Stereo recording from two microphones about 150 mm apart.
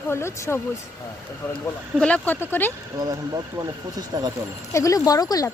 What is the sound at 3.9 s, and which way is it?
Speech, 25° right (ahead or behind).